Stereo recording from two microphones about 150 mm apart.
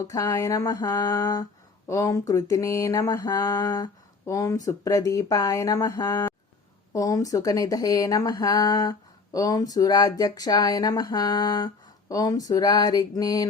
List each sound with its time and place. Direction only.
0.0 s speech: 25° left (ahead or behind)